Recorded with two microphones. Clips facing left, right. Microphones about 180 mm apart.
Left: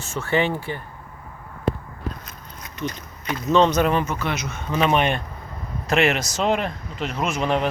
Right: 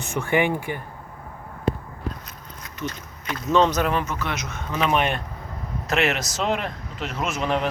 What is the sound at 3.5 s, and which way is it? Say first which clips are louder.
Speech: left 2 dB; 5° right (ahead or behind).